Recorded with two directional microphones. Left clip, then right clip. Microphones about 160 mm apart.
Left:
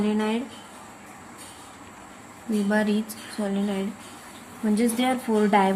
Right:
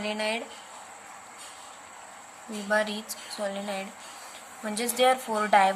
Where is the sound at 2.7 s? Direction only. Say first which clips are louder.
Even; 15° right (ahead or behind).